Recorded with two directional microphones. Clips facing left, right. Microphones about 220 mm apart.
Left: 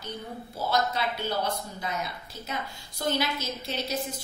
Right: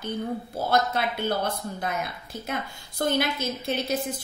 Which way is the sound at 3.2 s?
55° right (ahead or behind).